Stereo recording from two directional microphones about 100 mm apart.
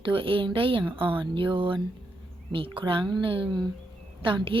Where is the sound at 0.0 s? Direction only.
60° right (ahead or behind).